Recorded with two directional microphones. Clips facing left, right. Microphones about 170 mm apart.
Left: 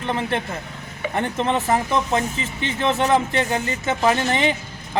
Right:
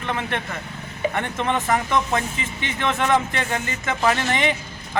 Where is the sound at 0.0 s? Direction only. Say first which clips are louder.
Left 3 dB; 30° left (ahead or behind).